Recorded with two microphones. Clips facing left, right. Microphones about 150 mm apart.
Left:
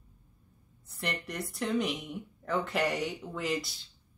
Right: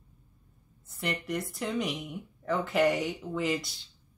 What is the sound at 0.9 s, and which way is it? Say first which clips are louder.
Speech: right 3 dB; centre (ahead or behind).